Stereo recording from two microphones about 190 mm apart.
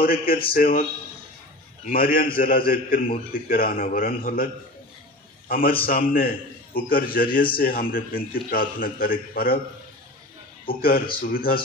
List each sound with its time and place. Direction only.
0.0 s a man's voice: 50° left (ahead or behind)
1.9 s a man's voice: 50° left (ahead or behind)
5.5 s a man's voice: 50° left (ahead or behind)
11.1 s a man's voice: 50° left (ahead or behind)